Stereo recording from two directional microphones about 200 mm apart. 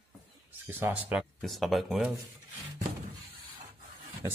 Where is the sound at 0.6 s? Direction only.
10° right (ahead or behind).